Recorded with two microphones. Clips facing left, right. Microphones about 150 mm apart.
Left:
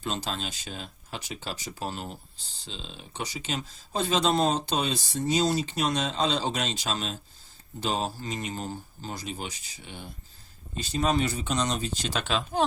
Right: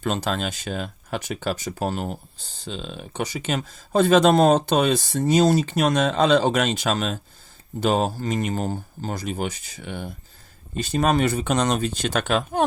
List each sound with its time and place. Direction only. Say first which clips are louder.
0.0 s speech: right 8 dB; 60° right (ahead or behind)